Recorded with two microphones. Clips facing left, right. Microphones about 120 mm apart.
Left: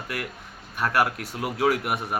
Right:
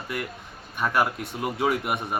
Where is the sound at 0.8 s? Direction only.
5° left (ahead or behind).